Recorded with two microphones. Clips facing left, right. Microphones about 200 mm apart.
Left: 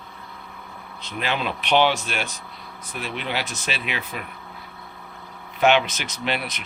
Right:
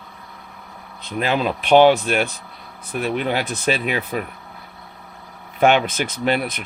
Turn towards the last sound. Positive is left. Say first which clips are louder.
# right 7 dB
turn(degrees=-50)  # may be behind; listen again after turning